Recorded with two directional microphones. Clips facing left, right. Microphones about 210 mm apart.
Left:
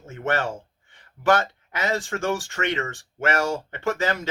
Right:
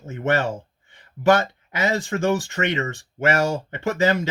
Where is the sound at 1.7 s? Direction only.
15° right (ahead or behind).